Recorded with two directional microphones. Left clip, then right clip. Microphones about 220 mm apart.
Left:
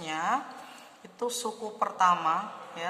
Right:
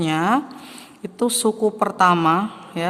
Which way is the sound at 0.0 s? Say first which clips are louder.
Right 10 dB; 45° right (ahead or behind).